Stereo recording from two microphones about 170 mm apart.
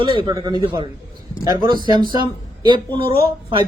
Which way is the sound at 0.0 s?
30° right (ahead or behind).